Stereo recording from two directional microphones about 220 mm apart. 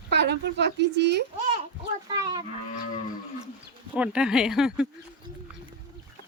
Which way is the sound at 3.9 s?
5° right (ahead or behind).